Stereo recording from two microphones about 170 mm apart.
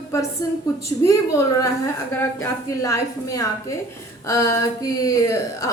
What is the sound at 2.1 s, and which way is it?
A woman's voice, 15° left (ahead or behind).